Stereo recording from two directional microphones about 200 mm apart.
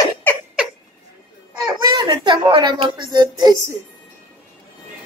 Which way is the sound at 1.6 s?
20° right (ahead or behind).